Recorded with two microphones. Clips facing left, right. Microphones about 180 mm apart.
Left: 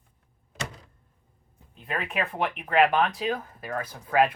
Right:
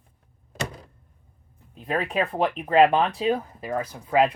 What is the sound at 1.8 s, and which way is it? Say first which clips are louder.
Speech: right 5 dB; 35° right (ahead or behind).